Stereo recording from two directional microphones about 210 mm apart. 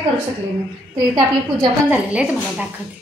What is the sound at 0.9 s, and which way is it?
Speech, 20° right (ahead or behind).